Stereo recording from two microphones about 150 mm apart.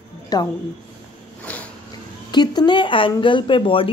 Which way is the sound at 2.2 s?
30° left (ahead or behind).